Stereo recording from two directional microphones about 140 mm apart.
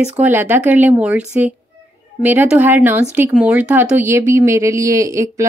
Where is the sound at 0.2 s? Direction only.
15° right (ahead or behind).